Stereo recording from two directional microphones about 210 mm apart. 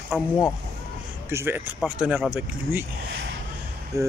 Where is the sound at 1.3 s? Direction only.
10° right (ahead or behind).